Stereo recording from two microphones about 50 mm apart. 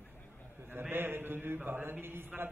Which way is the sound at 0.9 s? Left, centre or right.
Right.